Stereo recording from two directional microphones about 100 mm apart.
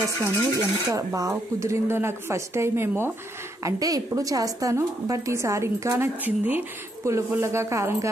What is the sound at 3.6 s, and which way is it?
A woman's voice, 35° right (ahead or behind).